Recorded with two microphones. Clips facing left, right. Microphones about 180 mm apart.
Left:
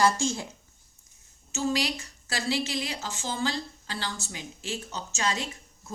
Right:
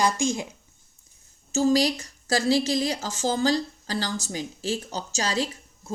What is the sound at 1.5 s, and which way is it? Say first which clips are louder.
A woman's voice: right 7 dB; 40° right (ahead or behind).